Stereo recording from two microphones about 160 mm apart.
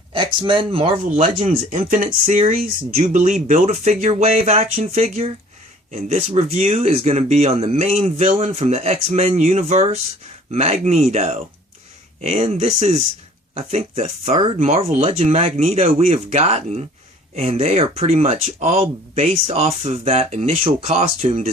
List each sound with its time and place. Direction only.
0.1 s speech: 30° right (ahead or behind)
1.1 s speech: 55° right (ahead or behind)
3.4 s speech: 40° right (ahead or behind)
14.6 s speech: 45° right (ahead or behind)